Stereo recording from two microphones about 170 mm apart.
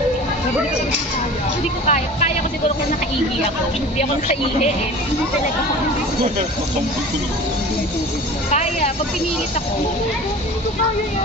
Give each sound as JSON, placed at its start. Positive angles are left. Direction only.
{"t": 1.9, "sound": "speech", "side_deg": 40}
{"t": 8.5, "sound": "speech", "side_deg": 40}